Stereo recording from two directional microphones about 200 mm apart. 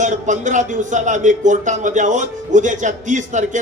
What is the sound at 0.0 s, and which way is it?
Speech, 40° right (ahead or behind).